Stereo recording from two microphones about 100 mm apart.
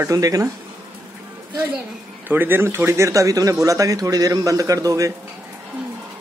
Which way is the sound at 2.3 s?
20° right (ahead or behind).